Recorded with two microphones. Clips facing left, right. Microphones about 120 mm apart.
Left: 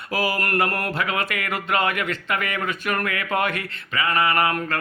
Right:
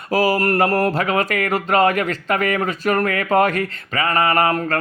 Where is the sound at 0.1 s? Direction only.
40° right (ahead or behind).